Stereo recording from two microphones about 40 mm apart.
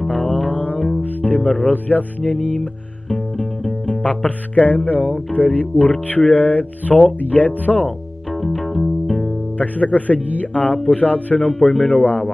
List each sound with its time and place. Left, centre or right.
0.3 s music: left
0.7 s music: centre
1.0 s music: left
1.4 s speech: centre
1.7 s speech: left
2.5 s speech: left
8.3 s music: centre
9.6 s speech: left